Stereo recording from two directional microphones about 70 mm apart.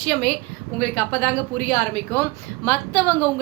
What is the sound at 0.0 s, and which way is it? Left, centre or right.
A woman's voice, left.